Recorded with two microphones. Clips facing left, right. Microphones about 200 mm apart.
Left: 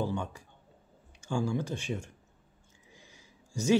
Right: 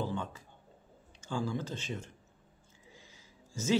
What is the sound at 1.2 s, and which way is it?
Speech, 15° left (ahead or behind).